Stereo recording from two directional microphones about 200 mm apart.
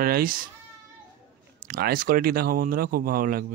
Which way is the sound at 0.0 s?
45° right (ahead or behind).